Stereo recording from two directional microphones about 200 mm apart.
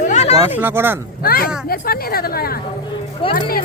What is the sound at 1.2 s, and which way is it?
Speech, 45° left (ahead or behind).